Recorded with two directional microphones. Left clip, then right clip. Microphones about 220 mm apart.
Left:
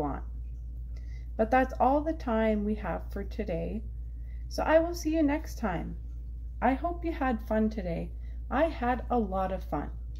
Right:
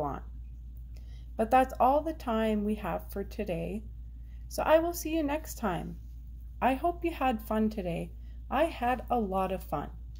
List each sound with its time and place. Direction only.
1.3 s a woman's voice: 35° right (ahead or behind)